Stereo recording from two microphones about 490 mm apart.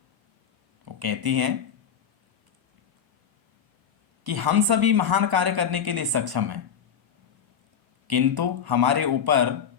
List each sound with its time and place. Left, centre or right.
0.9 s speech: right
4.2 s a woman's voice: right
8.0 s a woman's voice: right